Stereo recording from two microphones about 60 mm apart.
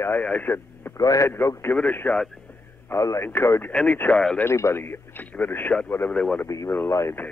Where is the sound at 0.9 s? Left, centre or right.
Left.